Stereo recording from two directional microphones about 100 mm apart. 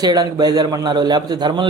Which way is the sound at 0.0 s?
40° right (ahead or behind).